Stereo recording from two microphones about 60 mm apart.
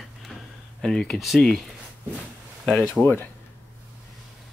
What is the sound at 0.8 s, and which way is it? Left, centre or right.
Speech, centre.